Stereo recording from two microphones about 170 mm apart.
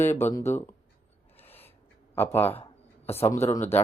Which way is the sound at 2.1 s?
10° left (ahead or behind).